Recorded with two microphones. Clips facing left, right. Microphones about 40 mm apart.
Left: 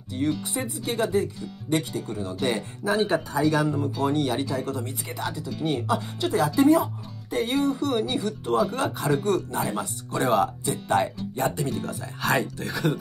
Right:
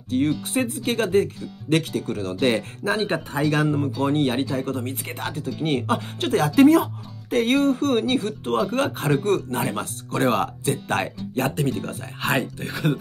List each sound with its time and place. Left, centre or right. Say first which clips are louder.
0.4 s speech: right 6 dB; right
2.4 s speech: right 4 dB; right
3.0 s speech: left 1 dB; right
11.7 s speech: right 1 dB; right